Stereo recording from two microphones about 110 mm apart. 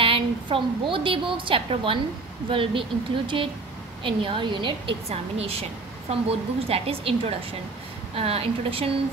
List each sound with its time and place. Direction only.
0.0 s a woman's voice: 55° right (ahead or behind)
5.1 s a woman's voice: 65° right (ahead or behind)